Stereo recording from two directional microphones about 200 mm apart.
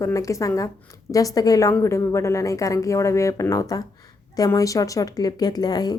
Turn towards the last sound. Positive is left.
turn(degrees=20)  # may be behind; listen again after turning